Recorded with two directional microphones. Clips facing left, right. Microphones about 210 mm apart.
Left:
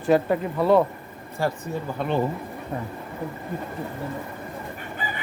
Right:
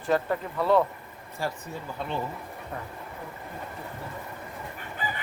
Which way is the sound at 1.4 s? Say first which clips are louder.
Left 6 dB; 60° left (ahead or behind).